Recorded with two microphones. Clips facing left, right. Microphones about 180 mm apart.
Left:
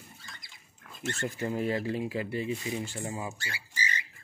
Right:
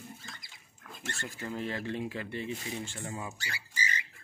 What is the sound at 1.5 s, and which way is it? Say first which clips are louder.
Speech: left 3 dB; 10° left (ahead or behind).